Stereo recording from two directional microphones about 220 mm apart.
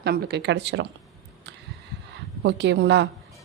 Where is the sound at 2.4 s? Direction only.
55° right (ahead or behind).